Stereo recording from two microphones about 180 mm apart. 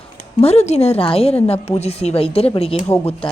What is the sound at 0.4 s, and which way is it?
A woman's voice, 35° left (ahead or behind).